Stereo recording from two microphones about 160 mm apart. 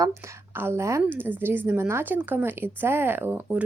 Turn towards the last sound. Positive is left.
turn(degrees=-15)  # may be behind; listen again after turning